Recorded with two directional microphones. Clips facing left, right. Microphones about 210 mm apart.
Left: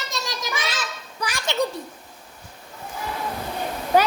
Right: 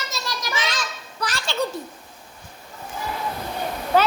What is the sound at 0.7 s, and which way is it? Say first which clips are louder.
Speech: right 1 dB; 10° left (ahead or behind).